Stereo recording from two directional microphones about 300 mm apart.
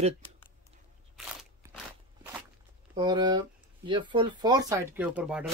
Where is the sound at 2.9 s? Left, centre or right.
Centre.